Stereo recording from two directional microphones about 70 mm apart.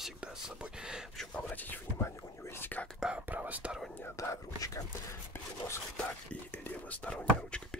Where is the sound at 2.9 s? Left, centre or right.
Centre.